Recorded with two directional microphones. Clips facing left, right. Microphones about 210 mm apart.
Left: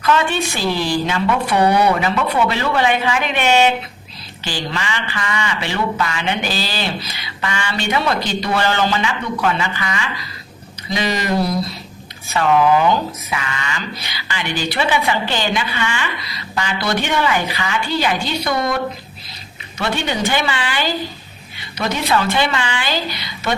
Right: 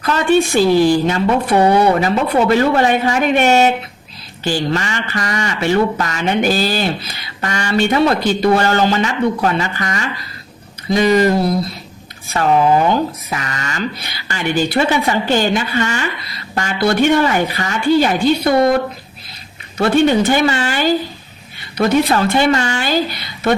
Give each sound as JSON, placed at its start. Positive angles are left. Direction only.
{"t": 0.0, "sound": "speech", "side_deg": -40}
{"t": 12.3, "sound": "speech", "side_deg": -35}
{"t": 19.8, "sound": "speech", "side_deg": -45}
{"t": 22.1, "sound": "speech", "side_deg": -40}